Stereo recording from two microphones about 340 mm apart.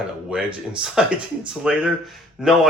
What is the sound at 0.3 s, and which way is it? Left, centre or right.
Speech, centre.